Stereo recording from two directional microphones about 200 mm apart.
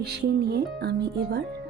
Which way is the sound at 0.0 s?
55° right (ahead or behind).